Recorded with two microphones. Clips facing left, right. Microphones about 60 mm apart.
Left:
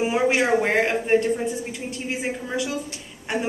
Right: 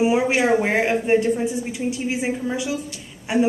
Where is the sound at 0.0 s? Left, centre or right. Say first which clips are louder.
Right 2 dB; centre.